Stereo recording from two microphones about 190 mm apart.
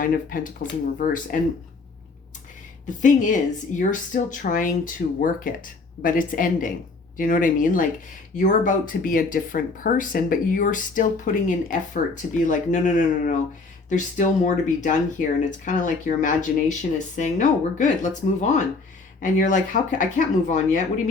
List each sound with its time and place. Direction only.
0.0 s speech: 45° left (ahead or behind)
2.8 s speech: 40° left (ahead or behind)